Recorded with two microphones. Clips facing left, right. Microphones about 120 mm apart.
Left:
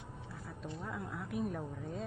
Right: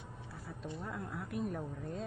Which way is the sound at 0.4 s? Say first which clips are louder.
Right 1 dB; centre (ahead or behind).